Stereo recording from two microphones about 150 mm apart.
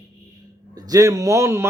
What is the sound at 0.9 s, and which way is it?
Speech, 20° right (ahead or behind).